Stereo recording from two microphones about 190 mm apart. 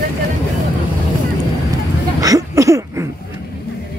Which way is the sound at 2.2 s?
15° right (ahead or behind).